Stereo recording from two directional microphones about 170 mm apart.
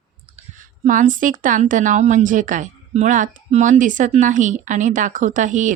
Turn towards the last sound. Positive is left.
turn(degrees=-50)  # may be behind; listen again after turning